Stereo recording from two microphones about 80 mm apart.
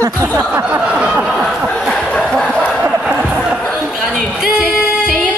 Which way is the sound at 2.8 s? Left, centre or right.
Centre.